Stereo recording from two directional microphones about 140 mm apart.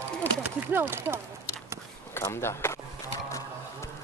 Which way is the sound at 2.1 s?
20° left (ahead or behind).